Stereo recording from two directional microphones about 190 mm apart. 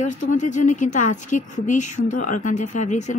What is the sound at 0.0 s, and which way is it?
A woman's voice, 40° left (ahead or behind).